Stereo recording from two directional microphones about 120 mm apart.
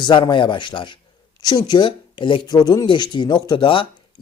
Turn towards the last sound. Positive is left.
turn(degrees=45)  # may be behind; listen again after turning